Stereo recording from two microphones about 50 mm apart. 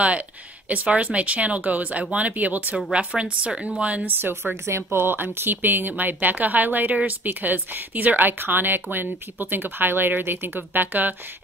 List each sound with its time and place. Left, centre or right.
0.8 s speech: right
2.9 s speech: right
3.5 s speech: centre
3.8 s speech: right
4.6 s speech: right